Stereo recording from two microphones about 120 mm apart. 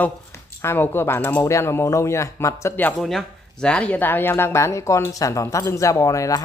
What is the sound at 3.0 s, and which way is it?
Speech, 5° left (ahead or behind).